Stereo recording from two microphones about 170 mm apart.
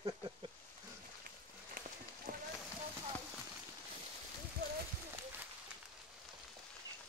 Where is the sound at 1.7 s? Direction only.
55° right (ahead or behind).